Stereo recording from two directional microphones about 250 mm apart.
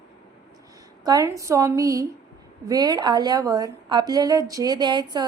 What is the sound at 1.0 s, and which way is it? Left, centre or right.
A woman's voice, centre.